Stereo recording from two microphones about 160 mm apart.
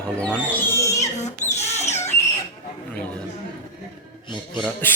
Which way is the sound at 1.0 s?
45° left (ahead or behind).